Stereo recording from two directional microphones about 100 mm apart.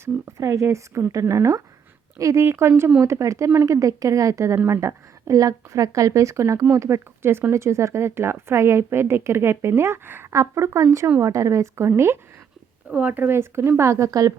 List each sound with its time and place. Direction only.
0.0 s a woman's voice: 30° right (ahead or behind)